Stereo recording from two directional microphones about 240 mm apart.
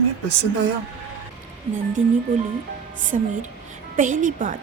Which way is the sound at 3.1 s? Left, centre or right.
Right.